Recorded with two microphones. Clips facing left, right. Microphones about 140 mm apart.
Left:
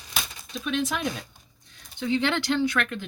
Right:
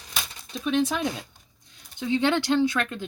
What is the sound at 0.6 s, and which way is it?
Speech, 30° right (ahead or behind).